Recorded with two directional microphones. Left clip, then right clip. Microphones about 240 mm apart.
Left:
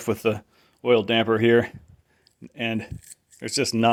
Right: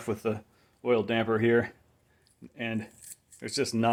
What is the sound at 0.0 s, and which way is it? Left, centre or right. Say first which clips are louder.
Speech: left 7 dB; left.